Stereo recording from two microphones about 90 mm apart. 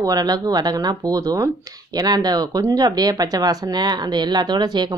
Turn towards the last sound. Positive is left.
turn(degrees=-55)  # may be behind; listen again after turning